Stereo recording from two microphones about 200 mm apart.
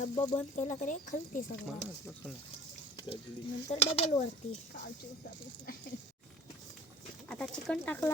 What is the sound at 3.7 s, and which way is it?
Speech, 35° left (ahead or behind).